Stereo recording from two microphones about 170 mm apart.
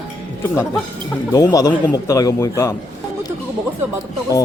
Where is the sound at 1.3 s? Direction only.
20° left (ahead or behind).